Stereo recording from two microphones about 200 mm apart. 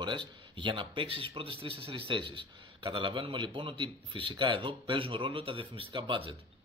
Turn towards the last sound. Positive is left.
turn(degrees=-25)  # may be behind; listen again after turning